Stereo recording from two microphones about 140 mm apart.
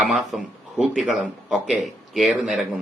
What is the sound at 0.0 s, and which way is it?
Speech, centre (ahead or behind).